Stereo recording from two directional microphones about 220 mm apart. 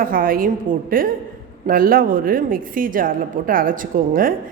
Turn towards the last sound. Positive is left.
turn(degrees=-40)  # may be behind; listen again after turning